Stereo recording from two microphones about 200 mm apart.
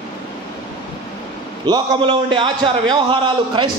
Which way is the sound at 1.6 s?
20° right (ahead or behind).